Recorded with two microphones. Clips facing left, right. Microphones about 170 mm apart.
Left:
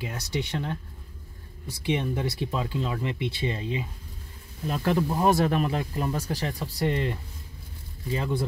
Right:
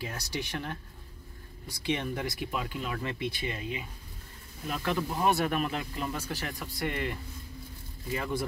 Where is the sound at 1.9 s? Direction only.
20° left (ahead or behind).